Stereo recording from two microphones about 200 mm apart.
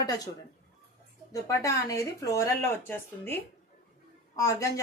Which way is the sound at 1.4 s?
15° left (ahead or behind).